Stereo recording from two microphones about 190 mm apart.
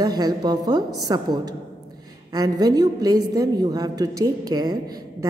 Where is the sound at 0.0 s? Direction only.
20° right (ahead or behind).